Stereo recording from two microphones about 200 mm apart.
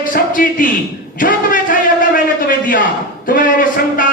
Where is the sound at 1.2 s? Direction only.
45° left (ahead or behind).